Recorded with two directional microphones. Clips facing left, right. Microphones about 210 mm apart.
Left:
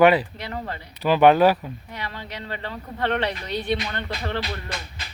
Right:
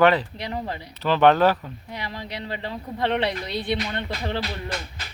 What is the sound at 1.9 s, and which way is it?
A woman's voice, 15° right (ahead or behind).